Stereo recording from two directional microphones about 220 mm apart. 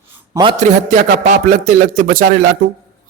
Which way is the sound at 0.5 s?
35° right (ahead or behind).